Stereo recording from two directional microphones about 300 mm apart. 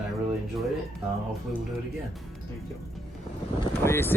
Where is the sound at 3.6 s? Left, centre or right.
Centre.